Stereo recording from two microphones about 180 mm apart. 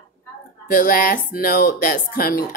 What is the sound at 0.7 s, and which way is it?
Speech, 50° left (ahead or behind).